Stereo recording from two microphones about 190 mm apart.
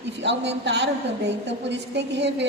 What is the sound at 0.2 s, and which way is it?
A woman's voice, 65° right (ahead or behind).